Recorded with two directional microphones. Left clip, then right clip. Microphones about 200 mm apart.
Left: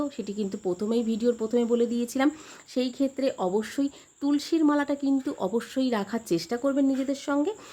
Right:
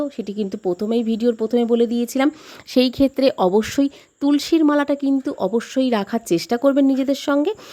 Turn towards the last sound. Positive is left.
turn(degrees=-40)  # may be behind; listen again after turning